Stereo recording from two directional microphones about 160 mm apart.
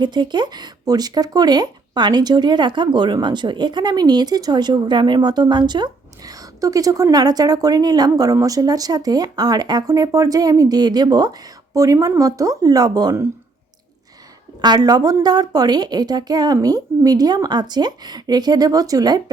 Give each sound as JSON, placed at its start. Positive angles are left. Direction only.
{"t": 0.0, "sound": "speech", "side_deg": -30}
{"t": 14.6, "sound": "speech", "side_deg": -25}